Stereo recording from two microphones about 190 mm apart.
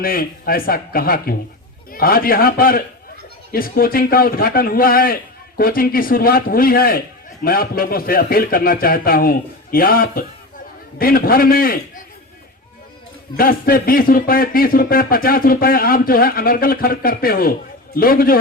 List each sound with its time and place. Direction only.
0.0 s speech: 50° left (ahead or behind)
13.3 s speech: 50° left (ahead or behind)